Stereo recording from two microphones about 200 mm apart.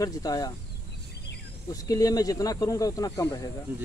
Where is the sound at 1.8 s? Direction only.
20° left (ahead or behind).